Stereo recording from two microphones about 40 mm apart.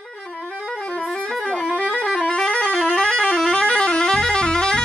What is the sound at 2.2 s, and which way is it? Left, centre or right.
Vehicle horn, left.